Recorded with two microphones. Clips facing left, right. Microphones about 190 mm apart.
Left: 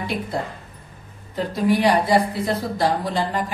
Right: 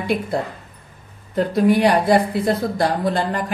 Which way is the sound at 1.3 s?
55° right (ahead or behind).